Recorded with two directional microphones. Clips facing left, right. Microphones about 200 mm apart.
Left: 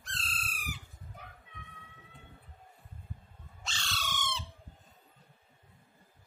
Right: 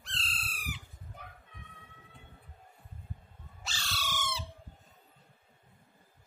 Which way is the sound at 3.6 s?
5° right (ahead or behind).